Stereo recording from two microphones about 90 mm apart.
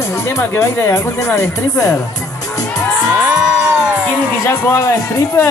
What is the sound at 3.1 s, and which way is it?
Music, 25° right (ahead or behind).